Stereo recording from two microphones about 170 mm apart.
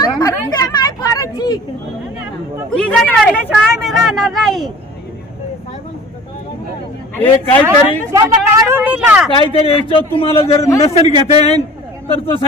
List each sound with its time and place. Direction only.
0.0 s chatter: 20° left (ahead or behind)
2.7 s a sound: 5° left (ahead or behind)
3.5 s speech: centre (ahead or behind)
7.2 s a man's voice: 10° left (ahead or behind)
7.6 s speech: 10° right (ahead or behind)
9.3 s a man's voice: 30° left (ahead or behind)
10.6 s a man's voice: 15° left (ahead or behind)
11.3 s a man's voice: 40° left (ahead or behind)